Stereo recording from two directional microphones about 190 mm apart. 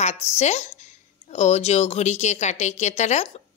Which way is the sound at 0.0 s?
35° left (ahead or behind).